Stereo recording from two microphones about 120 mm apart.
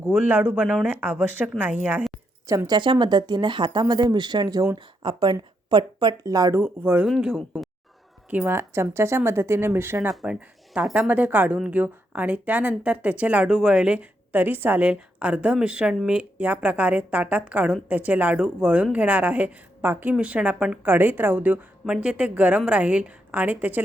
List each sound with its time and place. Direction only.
0.1 s a woman's voice: 15° right (ahead or behind)
2.6 s speech: 40° right (ahead or behind); by 7.1 s 20° right (ahead or behind)
7.1 s speech: 5° right (ahead or behind)
8.3 s a woman's voice: 15° right (ahead or behind)